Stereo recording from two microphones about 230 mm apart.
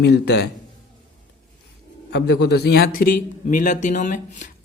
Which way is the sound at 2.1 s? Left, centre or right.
Left.